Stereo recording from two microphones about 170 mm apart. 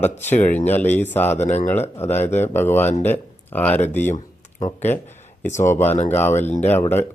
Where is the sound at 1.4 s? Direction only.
40° left (ahead or behind).